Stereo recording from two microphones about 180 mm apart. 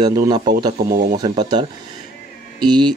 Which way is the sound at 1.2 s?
25° right (ahead or behind).